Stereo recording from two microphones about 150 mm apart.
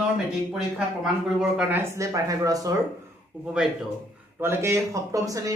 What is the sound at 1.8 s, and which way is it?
Speech, 20° right (ahead or behind).